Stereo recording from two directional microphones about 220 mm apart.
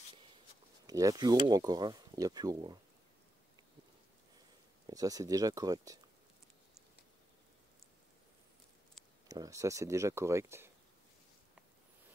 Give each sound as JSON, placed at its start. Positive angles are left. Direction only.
{"t": 0.8, "sound": "speech", "side_deg": -15}
{"t": 4.8, "sound": "speech", "side_deg": -15}
{"t": 9.3, "sound": "speech", "side_deg": -15}